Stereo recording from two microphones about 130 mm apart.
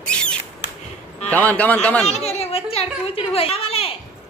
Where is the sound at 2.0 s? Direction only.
55° left (ahead or behind).